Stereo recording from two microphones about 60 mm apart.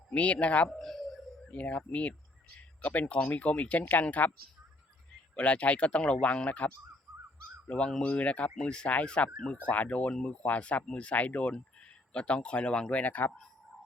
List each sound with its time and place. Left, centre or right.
0.1 s speech: left
0.8 s a sound: centre
1.5 s speech: left
5.4 s speech: left
7.7 s speech: centre